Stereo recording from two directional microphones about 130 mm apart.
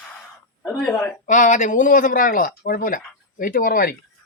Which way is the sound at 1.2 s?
80° left.